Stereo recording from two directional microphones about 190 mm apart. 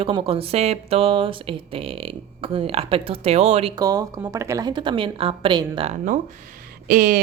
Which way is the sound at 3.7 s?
20° right (ahead or behind).